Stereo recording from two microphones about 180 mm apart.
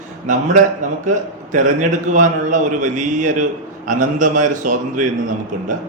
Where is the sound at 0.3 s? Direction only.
45° right (ahead or behind).